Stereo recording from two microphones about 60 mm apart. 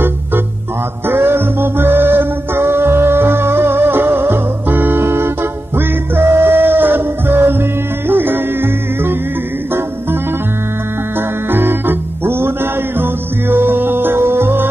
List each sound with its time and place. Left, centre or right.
1.0 s music: right
11.5 s music: right